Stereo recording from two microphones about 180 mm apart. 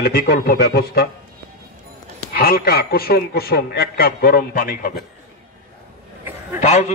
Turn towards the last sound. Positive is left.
turn(degrees=40)  # may be behind; listen again after turning